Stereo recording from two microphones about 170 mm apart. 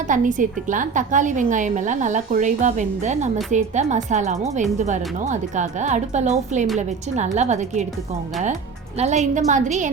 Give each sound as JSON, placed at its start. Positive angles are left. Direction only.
{"t": 0.1, "sound": "a woman's voice", "side_deg": -50}
{"t": 9.0, "sound": "a woman's voice", "side_deg": -40}